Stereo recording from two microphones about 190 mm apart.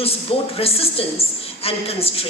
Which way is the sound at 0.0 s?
30° left (ahead or behind).